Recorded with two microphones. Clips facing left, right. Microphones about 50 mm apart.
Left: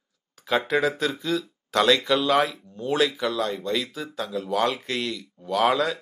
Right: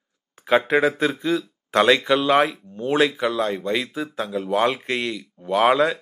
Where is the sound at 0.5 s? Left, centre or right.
Right.